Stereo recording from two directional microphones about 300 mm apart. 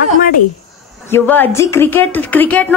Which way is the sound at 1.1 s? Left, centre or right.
Centre.